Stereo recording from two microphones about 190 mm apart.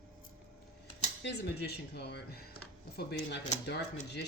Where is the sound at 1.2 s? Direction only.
60° left (ahead or behind).